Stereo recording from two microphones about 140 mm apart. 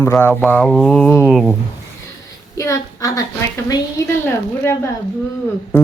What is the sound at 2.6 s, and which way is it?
Speech, 25° left (ahead or behind).